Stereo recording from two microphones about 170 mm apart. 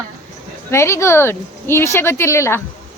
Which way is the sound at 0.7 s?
15° left (ahead or behind).